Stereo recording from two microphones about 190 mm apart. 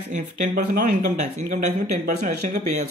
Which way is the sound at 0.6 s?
45° right (ahead or behind).